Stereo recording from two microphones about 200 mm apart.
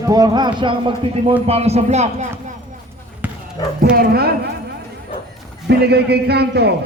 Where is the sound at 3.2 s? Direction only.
10° right (ahead or behind).